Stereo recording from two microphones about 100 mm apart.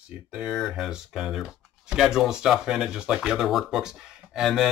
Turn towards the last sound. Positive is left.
turn(degrees=-5)  # may be behind; listen again after turning